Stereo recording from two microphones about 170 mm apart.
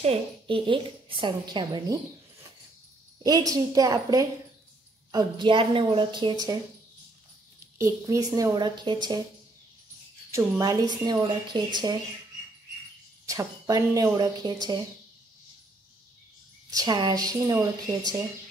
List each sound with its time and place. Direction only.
0.0 s a woman's voice: 35° right (ahead or behind)
3.3 s a woman's voice: 20° right (ahead or behind)
7.7 s a woman's voice: 20° right (ahead or behind)
10.3 s a woman's voice: 20° right (ahead or behind)
13.2 s a woman's voice: 20° right (ahead or behind)
16.7 s a woman's voice: 25° right (ahead or behind)